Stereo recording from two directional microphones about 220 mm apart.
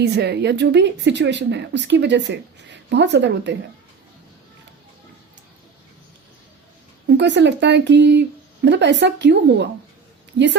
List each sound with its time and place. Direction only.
0.0 s a woman's voice: 50° right (ahead or behind)
7.1 s a woman's voice: 50° right (ahead or behind)